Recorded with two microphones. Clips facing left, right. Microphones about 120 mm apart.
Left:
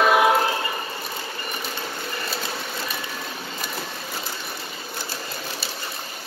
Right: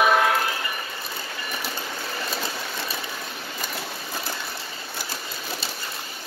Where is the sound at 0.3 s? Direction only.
25° left (ahead or behind).